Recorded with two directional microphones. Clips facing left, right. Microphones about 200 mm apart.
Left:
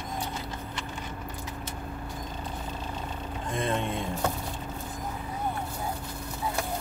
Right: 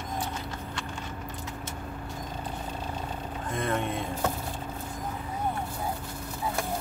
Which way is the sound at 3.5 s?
25° left (ahead or behind).